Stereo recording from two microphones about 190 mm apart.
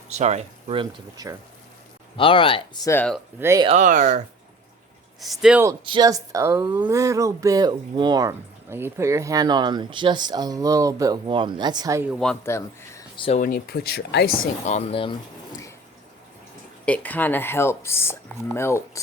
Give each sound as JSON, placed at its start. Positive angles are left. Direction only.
{"t": 0.1, "sound": "speech", "side_deg": -35}
{"t": 2.1, "sound": "speech", "side_deg": 30}
{"t": 2.9, "sound": "speech", "side_deg": 5}
{"t": 3.4, "sound": "speech", "side_deg": -15}
{"t": 3.7, "sound": "speech", "side_deg": -40}
{"t": 5.2, "sound": "speech", "side_deg": 0}
{"t": 5.8, "sound": "speech", "side_deg": -25}
{"t": 12.2, "sound": "speech", "side_deg": 10}
{"t": 13.1, "sound": "speech", "side_deg": 30}
{"t": 13.4, "sound": "speech", "side_deg": 50}
{"t": 14.6, "sound": "speech", "side_deg": 35}
{"t": 16.8, "sound": "speech", "side_deg": 5}